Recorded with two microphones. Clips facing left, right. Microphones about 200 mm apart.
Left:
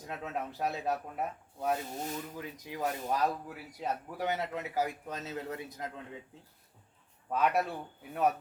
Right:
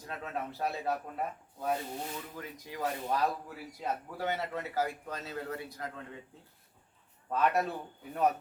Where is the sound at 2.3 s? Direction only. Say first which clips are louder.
Left 1 dB; 15° left (ahead or behind).